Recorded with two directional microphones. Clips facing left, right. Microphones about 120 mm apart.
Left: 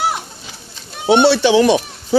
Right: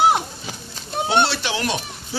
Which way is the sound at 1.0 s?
40° right (ahead or behind).